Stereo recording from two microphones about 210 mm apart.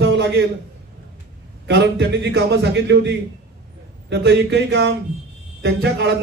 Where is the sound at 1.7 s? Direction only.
55° right (ahead or behind).